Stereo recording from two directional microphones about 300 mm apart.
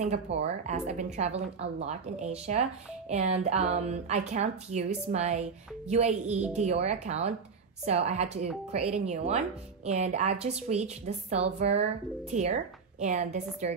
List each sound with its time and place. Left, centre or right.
0.4 s speech: right